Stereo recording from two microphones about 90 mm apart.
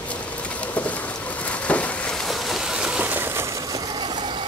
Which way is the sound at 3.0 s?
20° right (ahead or behind).